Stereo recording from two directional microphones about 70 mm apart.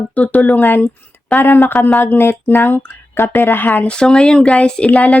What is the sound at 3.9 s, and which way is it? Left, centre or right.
Speech, centre.